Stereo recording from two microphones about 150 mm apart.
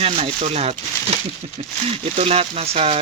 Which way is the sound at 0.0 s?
45° right (ahead or behind).